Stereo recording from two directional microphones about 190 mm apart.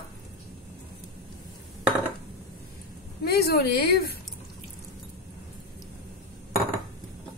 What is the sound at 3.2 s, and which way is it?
Speech, 55° left (ahead or behind).